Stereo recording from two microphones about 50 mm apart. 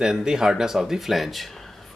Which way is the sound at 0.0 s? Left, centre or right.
Centre.